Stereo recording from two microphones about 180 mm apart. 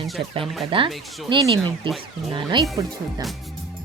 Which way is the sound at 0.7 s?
30° right (ahead or behind).